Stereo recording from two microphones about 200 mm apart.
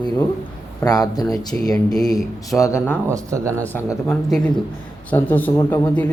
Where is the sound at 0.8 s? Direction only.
20° left (ahead or behind).